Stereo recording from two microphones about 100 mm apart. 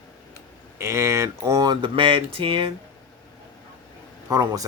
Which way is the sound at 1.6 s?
50° right (ahead or behind).